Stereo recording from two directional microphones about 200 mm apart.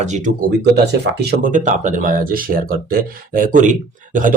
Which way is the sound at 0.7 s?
55° right (ahead or behind).